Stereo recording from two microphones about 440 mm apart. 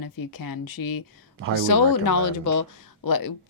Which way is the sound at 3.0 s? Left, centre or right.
Left.